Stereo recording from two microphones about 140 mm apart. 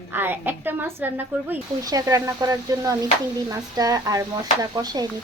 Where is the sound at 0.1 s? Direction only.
15° right (ahead or behind).